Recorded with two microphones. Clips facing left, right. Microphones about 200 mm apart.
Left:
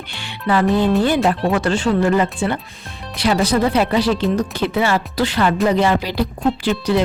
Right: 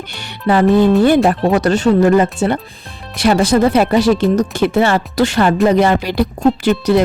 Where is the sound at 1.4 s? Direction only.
35° right (ahead or behind).